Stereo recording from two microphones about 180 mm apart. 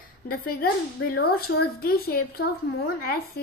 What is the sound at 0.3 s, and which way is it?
A woman's voice, 55° left (ahead or behind).